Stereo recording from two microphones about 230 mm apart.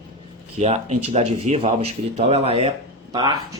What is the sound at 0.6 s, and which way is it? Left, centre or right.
Speech, right.